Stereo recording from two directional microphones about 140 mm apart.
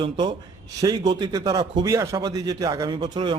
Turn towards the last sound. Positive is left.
turn(degrees=-30)  # may be behind; listen again after turning